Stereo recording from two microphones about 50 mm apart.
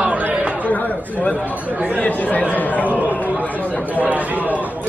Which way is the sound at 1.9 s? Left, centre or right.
Left.